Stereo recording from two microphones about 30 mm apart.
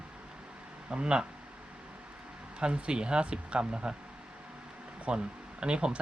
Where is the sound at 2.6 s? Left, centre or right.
Right.